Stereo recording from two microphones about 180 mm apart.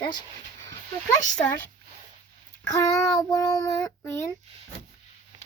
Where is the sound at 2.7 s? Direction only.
20° left (ahead or behind).